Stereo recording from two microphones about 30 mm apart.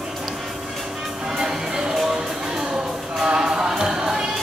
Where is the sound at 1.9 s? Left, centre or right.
Centre.